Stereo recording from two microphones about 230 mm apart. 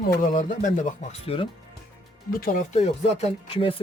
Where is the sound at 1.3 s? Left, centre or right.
Left.